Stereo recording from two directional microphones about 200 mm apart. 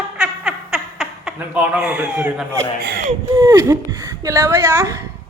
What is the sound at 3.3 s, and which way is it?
A woman's voice, 20° right (ahead or behind).